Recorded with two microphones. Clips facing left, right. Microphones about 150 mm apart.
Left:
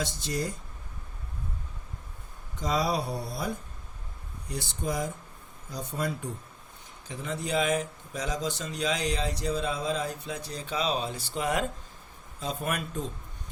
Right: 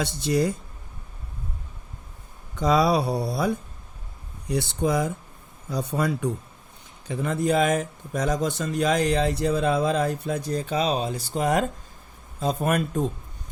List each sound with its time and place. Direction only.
0.0 s speech: 65° right (ahead or behind)
2.6 s speech: 70° right (ahead or behind)
7.1 s speech: 55° right (ahead or behind)